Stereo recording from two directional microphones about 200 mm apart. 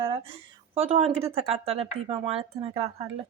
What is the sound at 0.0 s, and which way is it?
Speech, 25° right (ahead or behind).